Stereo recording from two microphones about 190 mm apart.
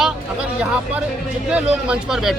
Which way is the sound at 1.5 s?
5° right (ahead or behind).